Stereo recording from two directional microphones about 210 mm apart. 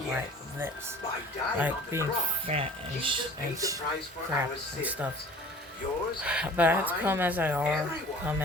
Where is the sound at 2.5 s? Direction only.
25° right (ahead or behind).